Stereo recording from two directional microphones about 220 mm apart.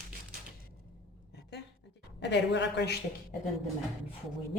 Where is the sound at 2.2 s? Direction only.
55° left (ahead or behind).